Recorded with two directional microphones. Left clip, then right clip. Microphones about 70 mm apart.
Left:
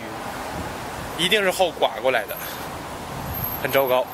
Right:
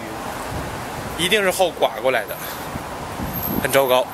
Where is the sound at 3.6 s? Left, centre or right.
Right.